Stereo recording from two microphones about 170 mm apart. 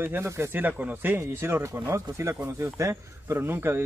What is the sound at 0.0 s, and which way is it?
Speech, 15° right (ahead or behind).